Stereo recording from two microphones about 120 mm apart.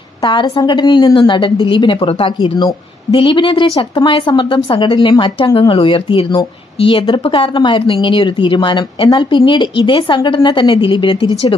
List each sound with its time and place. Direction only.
0.2 s a woman's voice: 40° left (ahead or behind)